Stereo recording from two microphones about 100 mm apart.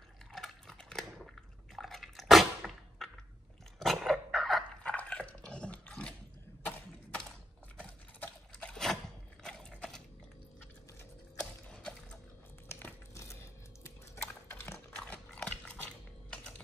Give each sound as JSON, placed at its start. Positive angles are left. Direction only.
{"t": 0.3, "sound": "dog", "side_deg": 5}
{"t": 1.8, "sound": "drip", "side_deg": 0}
{"t": 3.8, "sound": "dog", "side_deg": 0}
{"t": 4.9, "sound": "dog", "side_deg": 15}
{"t": 6.6, "sound": "mechanisms", "side_deg": 10}
{"t": 7.7, "sound": "a sound", "side_deg": 10}
{"t": 11.6, "sound": "a sound", "side_deg": 10}
{"t": 12.6, "sound": "a sound", "side_deg": 25}
{"t": 14.2, "sound": "dog", "side_deg": 20}